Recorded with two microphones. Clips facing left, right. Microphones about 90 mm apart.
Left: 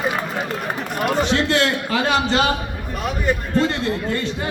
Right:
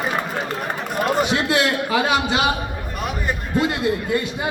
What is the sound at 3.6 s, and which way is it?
Speech, 10° right (ahead or behind).